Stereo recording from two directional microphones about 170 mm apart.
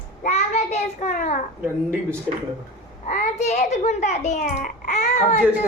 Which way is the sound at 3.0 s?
45° left (ahead or behind).